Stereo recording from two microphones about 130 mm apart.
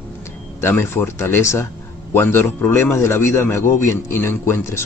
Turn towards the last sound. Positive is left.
turn(degrees=20)  # may be behind; listen again after turning